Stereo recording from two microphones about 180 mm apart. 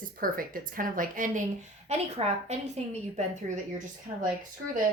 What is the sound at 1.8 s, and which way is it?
A woman's voice, 35° right (ahead or behind).